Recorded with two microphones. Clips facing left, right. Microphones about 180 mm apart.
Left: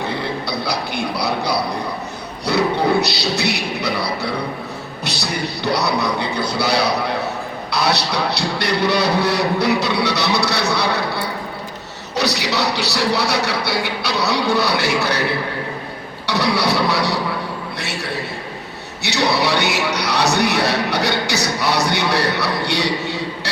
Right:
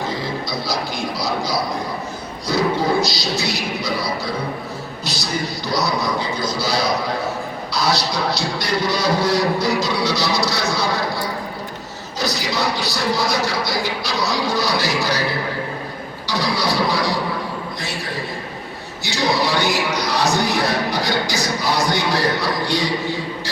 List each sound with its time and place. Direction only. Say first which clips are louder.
0.0 s a man's voice: left 1 dB; 65° left (ahead or behind)
16.2 s a man's voice: left 3 dB; 70° left (ahead or behind)